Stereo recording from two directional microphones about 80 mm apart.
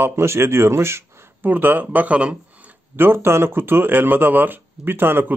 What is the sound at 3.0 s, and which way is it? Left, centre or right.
Speech, right.